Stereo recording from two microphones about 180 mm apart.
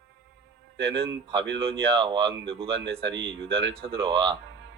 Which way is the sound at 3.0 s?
90° right.